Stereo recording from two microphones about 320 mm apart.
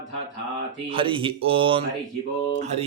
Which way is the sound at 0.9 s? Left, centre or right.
Centre.